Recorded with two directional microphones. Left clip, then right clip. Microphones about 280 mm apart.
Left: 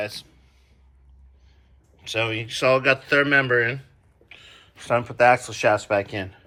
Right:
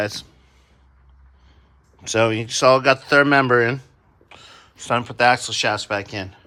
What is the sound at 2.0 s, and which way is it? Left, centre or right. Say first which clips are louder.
Speech: right 6 dB; centre.